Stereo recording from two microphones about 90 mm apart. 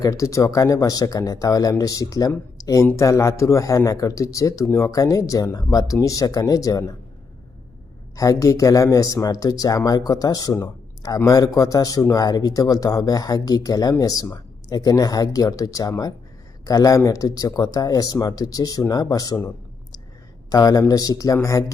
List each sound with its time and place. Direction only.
0.0 s speech: 40° left (ahead or behind)
2.6 s a sound: 40° left (ahead or behind)
2.8 s speech: 35° left (ahead or behind)
8.1 s speech: 40° left (ahead or behind)
20.5 s speech: 45° left (ahead or behind)